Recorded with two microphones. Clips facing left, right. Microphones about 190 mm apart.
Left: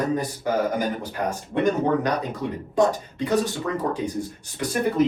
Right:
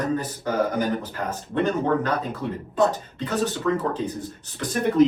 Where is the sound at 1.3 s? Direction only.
15° left (ahead or behind).